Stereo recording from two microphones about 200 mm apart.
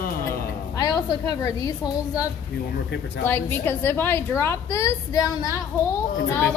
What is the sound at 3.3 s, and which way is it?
A woman's voice, 10° left (ahead or behind).